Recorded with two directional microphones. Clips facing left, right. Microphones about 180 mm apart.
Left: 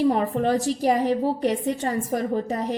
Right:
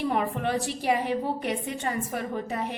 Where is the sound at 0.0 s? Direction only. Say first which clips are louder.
Left 6 dB; 35° left (ahead or behind).